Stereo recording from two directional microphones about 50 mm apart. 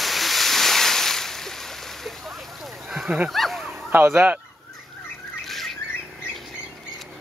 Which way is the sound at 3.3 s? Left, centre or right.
Centre.